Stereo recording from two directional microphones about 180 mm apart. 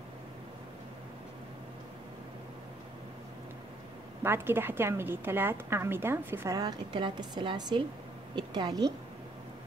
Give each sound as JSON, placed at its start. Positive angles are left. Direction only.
{"t": 4.2, "sound": "a woman's voice", "side_deg": -10}